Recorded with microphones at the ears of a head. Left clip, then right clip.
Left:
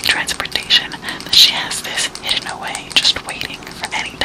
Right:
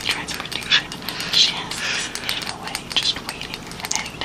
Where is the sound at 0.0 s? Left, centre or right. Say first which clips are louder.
Left 8 dB; left.